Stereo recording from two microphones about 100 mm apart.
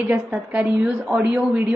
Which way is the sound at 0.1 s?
10° right (ahead or behind).